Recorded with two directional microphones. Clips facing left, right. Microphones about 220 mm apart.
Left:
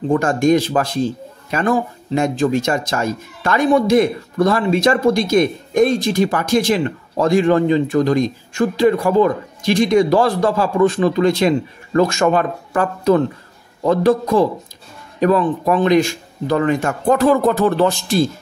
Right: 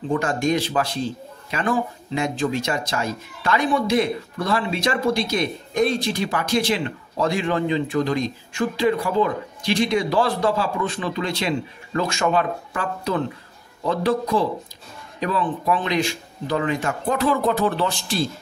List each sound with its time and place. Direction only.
0.1 s speech: 45° left (ahead or behind)